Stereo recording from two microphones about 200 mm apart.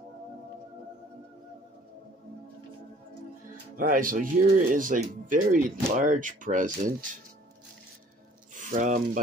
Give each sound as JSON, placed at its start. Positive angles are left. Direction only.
{"t": 3.7, "sound": "speech", "side_deg": -45}
{"t": 8.5, "sound": "speech", "side_deg": -40}